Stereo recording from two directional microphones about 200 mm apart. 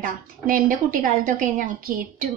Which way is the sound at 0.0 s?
45° right (ahead or behind).